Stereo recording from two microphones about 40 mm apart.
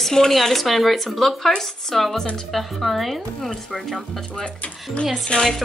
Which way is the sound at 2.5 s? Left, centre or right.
Centre.